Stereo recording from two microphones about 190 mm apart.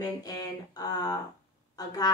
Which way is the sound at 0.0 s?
20° left (ahead or behind).